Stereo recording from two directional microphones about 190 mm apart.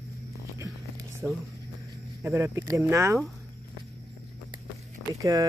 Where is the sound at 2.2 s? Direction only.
15° right (ahead or behind).